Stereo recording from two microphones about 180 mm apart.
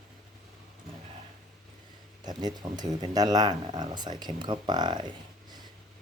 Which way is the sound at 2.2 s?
25° right (ahead or behind).